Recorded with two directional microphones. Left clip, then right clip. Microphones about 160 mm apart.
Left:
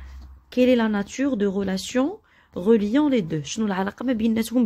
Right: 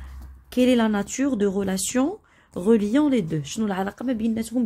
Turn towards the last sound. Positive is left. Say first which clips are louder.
# left 3 dB
turn(degrees=30)  # may be behind; listen again after turning